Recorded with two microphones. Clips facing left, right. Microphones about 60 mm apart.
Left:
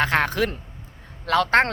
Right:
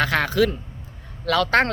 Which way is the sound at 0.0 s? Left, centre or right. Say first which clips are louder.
Right 1 dB; left.